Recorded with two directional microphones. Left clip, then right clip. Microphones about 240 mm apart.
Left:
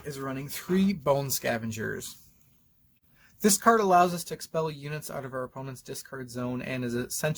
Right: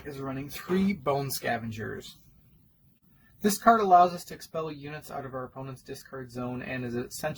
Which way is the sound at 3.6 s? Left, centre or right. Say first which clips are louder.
Right 2 dB; left.